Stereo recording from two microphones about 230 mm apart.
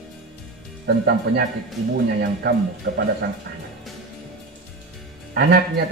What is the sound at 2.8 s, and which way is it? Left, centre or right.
Speech, right.